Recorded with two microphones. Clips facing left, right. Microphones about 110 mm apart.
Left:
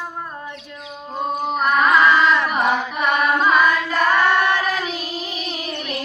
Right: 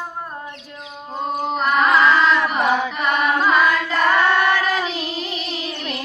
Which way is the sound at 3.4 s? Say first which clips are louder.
Even; 5° left (ahead or behind).